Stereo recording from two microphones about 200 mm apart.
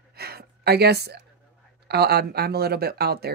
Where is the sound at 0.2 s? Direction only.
50° right (ahead or behind).